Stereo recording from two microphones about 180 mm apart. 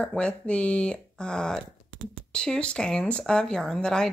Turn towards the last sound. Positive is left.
turn(degrees=5)  # may be behind; listen again after turning